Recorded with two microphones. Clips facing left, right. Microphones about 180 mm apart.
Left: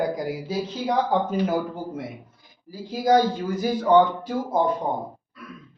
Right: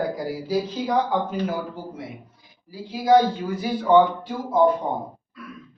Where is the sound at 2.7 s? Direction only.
45° left (ahead or behind).